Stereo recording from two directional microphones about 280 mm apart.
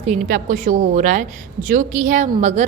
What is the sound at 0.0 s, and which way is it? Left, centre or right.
Speech, right.